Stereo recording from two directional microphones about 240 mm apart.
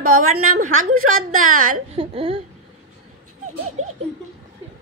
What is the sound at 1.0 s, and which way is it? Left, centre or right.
Speech, right.